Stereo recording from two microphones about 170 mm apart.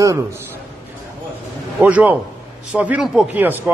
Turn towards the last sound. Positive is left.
turn(degrees=-10)  # may be behind; listen again after turning